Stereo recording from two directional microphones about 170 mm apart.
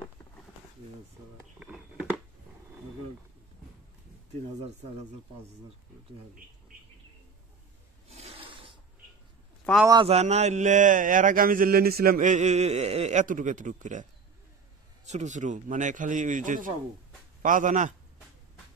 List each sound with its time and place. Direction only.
1.6 s a sound: 5° right (ahead or behind)
4.6 s speech: 40° right (ahead or behind)
8.1 s rub: 35° right (ahead or behind)
9.7 s a man's voice: 5° left (ahead or behind)
10.0 s speech: 40° right (ahead or behind)
15.0 s speech: 45° right (ahead or behind)